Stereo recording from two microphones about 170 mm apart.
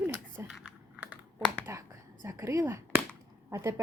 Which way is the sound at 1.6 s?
15° right (ahead or behind).